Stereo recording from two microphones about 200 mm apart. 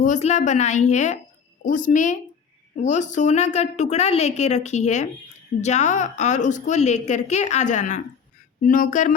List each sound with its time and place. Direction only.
0.0 s a woman's voice: 35° left (ahead or behind)